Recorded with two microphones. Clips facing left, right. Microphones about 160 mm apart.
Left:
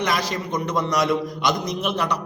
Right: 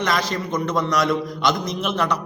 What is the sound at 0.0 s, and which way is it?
A man's voice, 15° left (ahead or behind).